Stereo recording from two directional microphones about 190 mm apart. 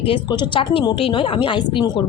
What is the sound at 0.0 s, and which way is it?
A woman's voice, 25° left (ahead or behind).